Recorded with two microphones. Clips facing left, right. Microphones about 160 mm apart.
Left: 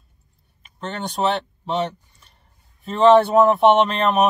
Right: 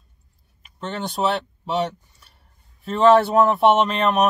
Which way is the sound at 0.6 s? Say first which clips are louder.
Even; centre (ahead or behind).